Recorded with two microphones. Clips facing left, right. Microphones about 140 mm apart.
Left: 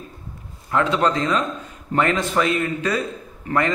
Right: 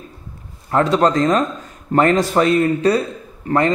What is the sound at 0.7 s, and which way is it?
A man's voice, 40° right (ahead or behind).